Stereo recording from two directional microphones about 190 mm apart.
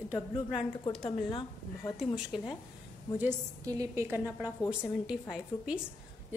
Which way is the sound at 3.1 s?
15° right (ahead or behind).